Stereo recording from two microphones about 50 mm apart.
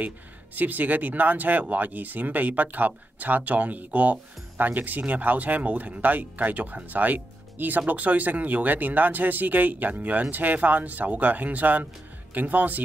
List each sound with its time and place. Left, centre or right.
0.6 s speech: right